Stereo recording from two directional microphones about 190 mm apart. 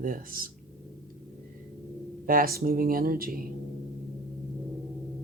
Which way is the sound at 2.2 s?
50° right (ahead or behind).